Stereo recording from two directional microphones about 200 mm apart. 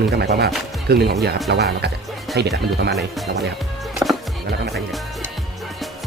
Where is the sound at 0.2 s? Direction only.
55° right (ahead or behind).